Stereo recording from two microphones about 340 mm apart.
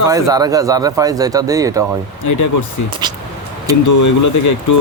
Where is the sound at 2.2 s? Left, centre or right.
Left.